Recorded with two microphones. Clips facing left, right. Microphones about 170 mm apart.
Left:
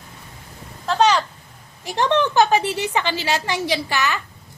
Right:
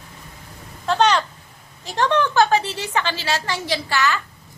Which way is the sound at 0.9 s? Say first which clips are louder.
Even; centre (ahead or behind).